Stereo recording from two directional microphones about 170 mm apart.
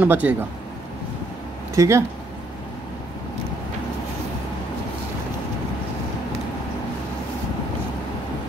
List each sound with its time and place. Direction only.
0.0 s speech: 10° right (ahead or behind)
1.8 s speech: 15° right (ahead or behind)